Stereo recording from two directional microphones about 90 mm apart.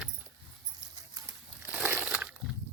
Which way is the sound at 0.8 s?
45° right (ahead or behind).